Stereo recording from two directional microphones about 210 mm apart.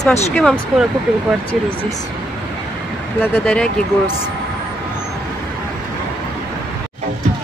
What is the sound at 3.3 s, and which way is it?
Speech, 5° left (ahead or behind).